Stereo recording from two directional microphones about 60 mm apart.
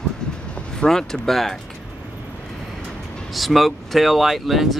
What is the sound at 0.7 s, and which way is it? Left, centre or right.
Speech, centre.